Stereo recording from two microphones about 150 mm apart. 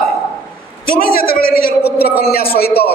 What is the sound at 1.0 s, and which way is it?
A man's voice, 80° left.